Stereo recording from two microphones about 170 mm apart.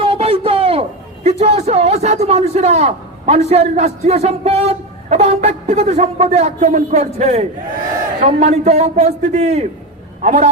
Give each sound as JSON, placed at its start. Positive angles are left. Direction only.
{"t": 0.0, "sound": "a man's voice", "side_deg": -35}